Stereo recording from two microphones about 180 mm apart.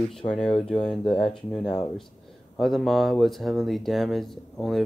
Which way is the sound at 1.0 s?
30° left (ahead or behind).